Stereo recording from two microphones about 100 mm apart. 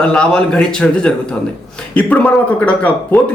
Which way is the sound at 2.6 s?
15° left (ahead or behind).